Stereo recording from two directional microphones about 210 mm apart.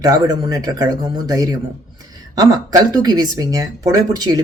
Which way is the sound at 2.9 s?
20° right (ahead or behind).